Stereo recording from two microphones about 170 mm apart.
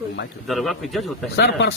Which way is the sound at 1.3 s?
85° left.